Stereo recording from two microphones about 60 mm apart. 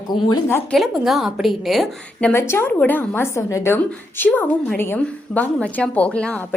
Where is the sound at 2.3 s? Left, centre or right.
Left.